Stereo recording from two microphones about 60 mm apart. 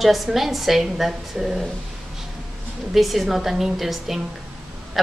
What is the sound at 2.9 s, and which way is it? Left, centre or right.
A woman's voice, centre.